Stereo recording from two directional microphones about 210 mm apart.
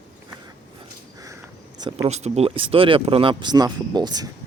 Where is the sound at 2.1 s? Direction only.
30° right (ahead or behind).